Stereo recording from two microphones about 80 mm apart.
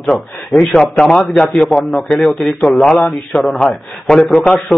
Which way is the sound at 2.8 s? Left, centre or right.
Centre.